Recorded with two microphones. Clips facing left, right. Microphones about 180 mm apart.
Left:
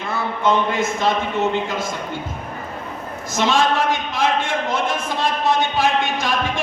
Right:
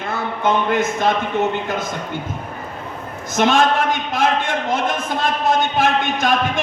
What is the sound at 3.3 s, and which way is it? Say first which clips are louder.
Speech: right 3 dB; 55° right (ahead or behind).